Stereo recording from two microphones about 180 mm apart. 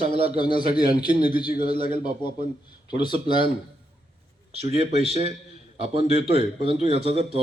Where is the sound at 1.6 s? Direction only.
35° right (ahead or behind).